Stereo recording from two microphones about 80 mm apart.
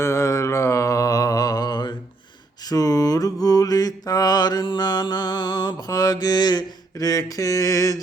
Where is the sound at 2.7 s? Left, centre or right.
Left.